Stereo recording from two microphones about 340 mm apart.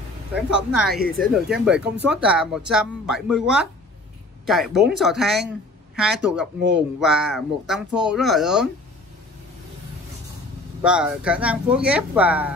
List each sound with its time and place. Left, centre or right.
0.5 s speech: centre
10.8 s speech: centre